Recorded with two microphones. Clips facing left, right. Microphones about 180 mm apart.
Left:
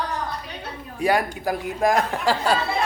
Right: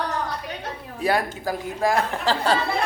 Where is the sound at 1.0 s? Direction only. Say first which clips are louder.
Left 2 dB; 15° left (ahead or behind).